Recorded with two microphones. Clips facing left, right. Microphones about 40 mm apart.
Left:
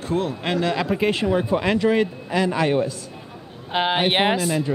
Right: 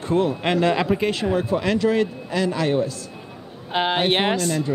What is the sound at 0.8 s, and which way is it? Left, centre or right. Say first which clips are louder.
Speech: left 1 dB; centre.